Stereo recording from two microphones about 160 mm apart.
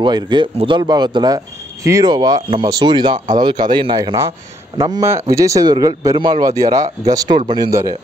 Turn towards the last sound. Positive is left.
turn(degrees=-25)  # may be behind; listen again after turning